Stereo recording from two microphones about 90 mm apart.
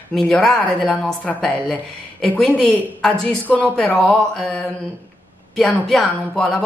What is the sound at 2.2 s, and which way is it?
Speech, 10° left (ahead or behind).